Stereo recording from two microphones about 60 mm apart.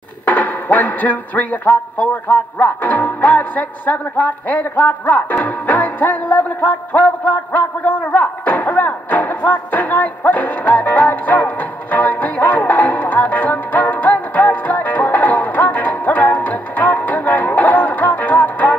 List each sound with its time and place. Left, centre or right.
0.2 s music: left